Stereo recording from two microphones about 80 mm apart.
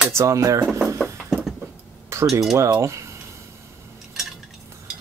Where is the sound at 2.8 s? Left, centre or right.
Right.